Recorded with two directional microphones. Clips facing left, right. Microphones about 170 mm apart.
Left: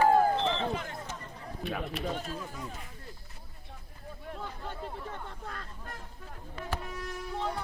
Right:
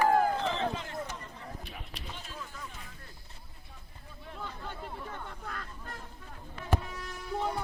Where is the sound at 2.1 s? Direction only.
45° left (ahead or behind).